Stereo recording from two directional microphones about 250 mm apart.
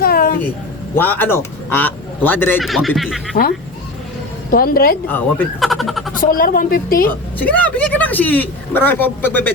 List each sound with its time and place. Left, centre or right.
0.0 s a sound: left
0.9 s a man's voice: centre
4.5 s a woman's voice: left
5.0 s speech: centre
6.1 s a woman's voice: left
7.3 s a man's voice: centre